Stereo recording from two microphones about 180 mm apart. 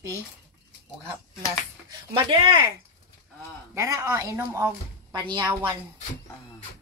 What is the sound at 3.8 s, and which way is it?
A woman's voice, 15° right (ahead or behind).